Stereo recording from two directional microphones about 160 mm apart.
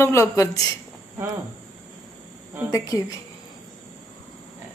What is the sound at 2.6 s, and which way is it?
Speech, 20° left (ahead or behind).